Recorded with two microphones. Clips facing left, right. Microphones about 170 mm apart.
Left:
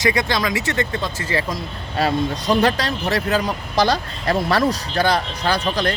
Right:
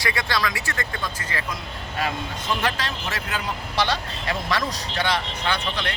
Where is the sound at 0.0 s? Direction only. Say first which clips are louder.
Left 6 dB; 20° left (ahead or behind).